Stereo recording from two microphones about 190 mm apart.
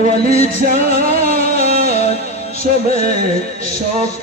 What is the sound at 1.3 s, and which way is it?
Music, 35° left (ahead or behind).